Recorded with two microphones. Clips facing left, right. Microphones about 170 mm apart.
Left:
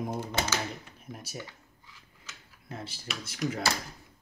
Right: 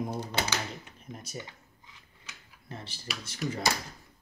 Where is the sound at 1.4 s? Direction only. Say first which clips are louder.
Even; 20° right (ahead or behind).